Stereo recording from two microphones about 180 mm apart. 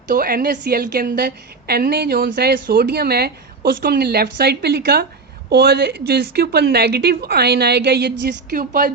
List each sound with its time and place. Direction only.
0.1 s a woman's voice: 55° right (ahead or behind)
8.5 s speech: 45° right (ahead or behind)